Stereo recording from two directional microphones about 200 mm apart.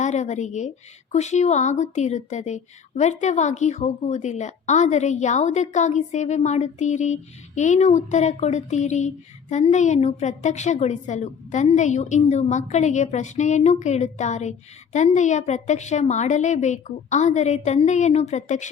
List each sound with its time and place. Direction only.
0.0 s speech: 35° left (ahead or behind)